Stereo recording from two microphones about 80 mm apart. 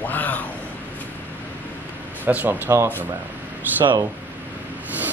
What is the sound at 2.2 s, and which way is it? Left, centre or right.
Speech, right.